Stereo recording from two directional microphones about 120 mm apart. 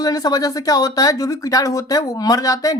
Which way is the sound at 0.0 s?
30° left (ahead or behind).